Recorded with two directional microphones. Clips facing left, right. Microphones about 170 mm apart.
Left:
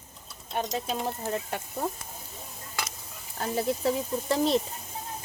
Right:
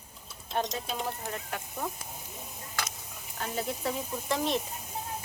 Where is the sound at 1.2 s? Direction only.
35° left (ahead or behind).